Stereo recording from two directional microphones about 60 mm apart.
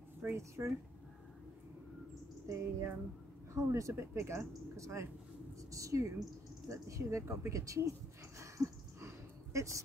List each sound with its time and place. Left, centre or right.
0.4 s speech: right
2.4 s speech: right
5.7 s a woman's voice: right
8.4 s a sound: right